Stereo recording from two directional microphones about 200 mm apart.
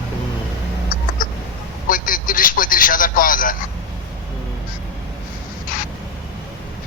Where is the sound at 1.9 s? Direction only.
45° left (ahead or behind).